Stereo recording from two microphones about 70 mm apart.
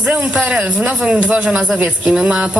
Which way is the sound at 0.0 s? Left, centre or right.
Centre.